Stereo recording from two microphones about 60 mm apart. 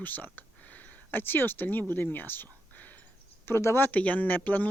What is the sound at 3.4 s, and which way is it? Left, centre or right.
Speech, left.